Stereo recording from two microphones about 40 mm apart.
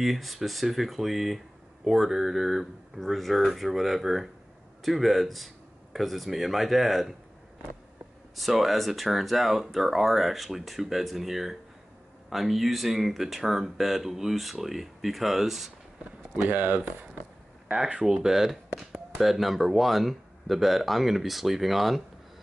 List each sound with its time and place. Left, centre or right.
0.0 s speech: centre
8.4 s speech: centre
16.4 s speech: right
17.9 s speech: centre